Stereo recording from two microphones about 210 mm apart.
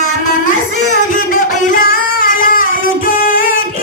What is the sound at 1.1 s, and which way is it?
Music, 40° left (ahead or behind).